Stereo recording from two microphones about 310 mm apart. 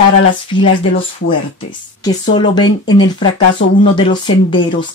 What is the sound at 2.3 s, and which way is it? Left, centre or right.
Speech, centre.